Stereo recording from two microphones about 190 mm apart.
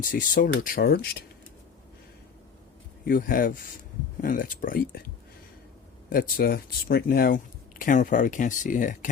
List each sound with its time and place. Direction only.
0.0 s speech: 45° left (ahead or behind)
3.1 s speech: 50° left (ahead or behind)
6.1 s speech: 50° left (ahead or behind)